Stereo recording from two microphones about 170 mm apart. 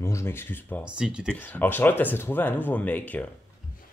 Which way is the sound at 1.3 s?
10° left (ahead or behind).